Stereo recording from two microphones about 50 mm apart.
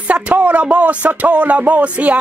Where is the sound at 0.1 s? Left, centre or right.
Right.